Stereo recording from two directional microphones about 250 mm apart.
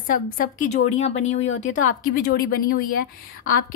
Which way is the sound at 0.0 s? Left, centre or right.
Left.